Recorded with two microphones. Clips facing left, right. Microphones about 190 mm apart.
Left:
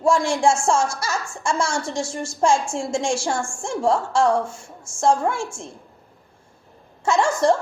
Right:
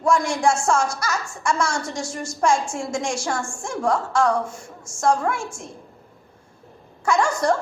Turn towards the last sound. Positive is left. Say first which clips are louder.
# left 2 dB
turn(degrees=25)  # may be behind; listen again after turning